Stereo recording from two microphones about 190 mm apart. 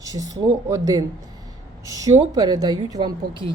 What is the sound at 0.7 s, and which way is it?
A woman's voice, 20° right (ahead or behind).